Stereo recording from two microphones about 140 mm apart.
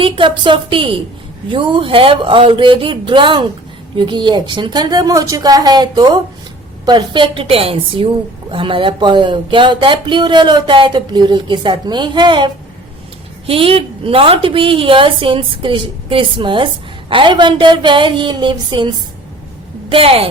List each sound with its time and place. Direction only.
0.0 s a woman's voice: 35° right (ahead or behind)
13.5 s speech: 40° right (ahead or behind)